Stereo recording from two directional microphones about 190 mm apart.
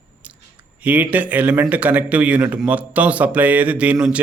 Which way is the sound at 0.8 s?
10° right (ahead or behind).